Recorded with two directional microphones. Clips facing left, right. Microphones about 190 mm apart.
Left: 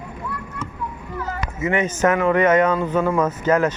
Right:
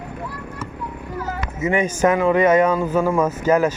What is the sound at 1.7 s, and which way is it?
Speech, 10° right (ahead or behind).